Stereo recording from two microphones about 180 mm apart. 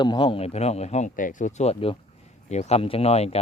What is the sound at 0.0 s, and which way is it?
A man's voice, 25° left (ahead or behind).